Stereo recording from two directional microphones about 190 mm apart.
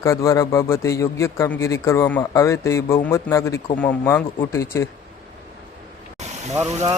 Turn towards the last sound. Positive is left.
turn(degrees=-15)  # may be behind; listen again after turning